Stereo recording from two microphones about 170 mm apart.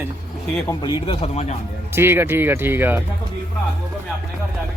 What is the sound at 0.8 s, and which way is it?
Speech, 30° left (ahead or behind).